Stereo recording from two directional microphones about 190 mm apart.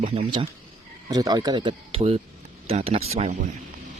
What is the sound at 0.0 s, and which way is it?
Speech, 30° right (ahead or behind).